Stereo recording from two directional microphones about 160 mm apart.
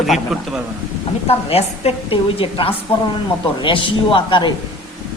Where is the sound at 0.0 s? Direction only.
Centre (ahead or behind).